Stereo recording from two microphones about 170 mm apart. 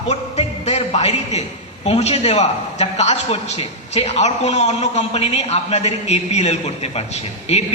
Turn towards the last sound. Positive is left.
turn(degrees=40)  # may be behind; listen again after turning